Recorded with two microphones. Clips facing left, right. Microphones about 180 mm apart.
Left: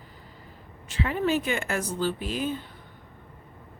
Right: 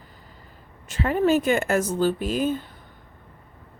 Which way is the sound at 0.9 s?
45° right (ahead or behind).